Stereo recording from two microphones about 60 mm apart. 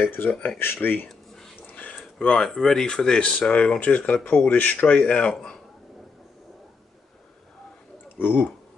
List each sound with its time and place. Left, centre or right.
0.0 s speech: left
1.0 s a sound: centre
1.7 s a sound: left
2.1 s speech: centre
2.4 s speech: centre
8.2 s speech: left